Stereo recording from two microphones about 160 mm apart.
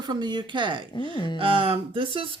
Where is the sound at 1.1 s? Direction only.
30° left (ahead or behind).